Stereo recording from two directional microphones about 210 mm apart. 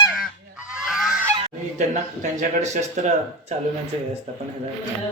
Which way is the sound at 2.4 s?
35° right (ahead or behind).